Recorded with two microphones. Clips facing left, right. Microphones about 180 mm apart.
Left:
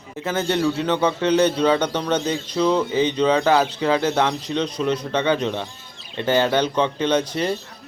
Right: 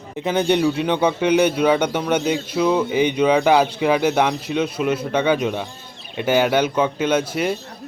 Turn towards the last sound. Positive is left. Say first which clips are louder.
# right 1 dB
turn(degrees=-10)  # may be behind; listen again after turning